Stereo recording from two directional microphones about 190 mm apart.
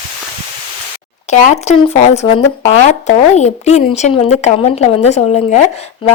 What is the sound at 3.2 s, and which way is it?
Speech, 35° left (ahead or behind).